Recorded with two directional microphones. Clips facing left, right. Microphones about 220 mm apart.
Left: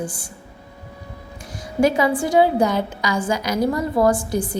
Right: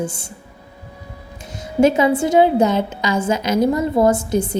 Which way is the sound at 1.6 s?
25° right (ahead or behind).